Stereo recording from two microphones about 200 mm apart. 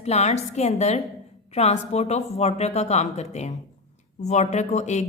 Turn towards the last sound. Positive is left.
turn(degrees=35)  # may be behind; listen again after turning